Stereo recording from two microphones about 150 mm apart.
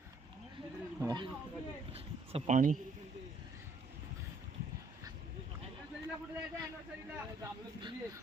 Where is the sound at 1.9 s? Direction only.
40° right (ahead or behind); by 2.8 s 55° right (ahead or behind).